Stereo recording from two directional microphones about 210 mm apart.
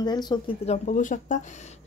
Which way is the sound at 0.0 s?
20° left (ahead or behind).